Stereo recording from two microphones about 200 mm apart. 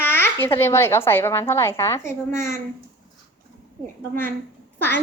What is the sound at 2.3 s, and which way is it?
Speech, 40° right (ahead or behind).